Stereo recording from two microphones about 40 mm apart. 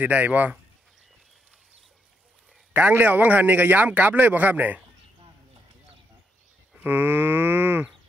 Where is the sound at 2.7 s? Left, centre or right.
Right.